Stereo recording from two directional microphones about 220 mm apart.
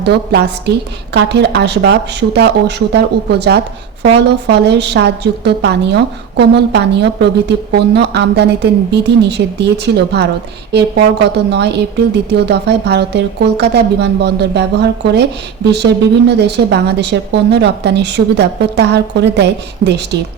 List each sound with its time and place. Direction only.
0.0 s a woman's voice: 50° right (ahead or behind)